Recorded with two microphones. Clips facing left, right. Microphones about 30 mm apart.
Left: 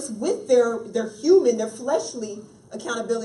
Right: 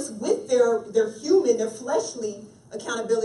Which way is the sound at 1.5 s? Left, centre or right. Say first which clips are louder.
Even; centre.